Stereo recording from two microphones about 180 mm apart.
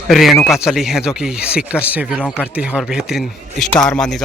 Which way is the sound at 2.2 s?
10° left (ahead or behind).